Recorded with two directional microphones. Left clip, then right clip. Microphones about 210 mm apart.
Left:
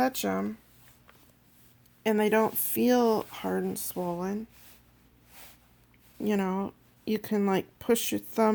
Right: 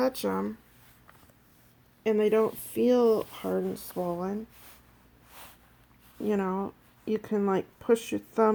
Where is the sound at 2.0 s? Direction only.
40° left (ahead or behind).